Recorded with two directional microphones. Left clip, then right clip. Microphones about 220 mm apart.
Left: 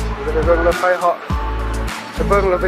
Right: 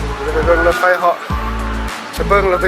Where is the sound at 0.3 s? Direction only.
15° left (ahead or behind).